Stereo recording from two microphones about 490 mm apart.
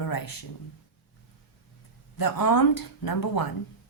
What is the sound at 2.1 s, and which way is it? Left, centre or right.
Speech, left.